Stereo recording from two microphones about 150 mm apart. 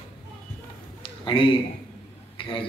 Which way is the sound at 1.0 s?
35° left (ahead or behind).